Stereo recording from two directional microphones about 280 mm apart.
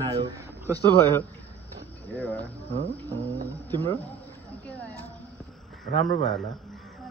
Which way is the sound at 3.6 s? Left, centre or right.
Centre.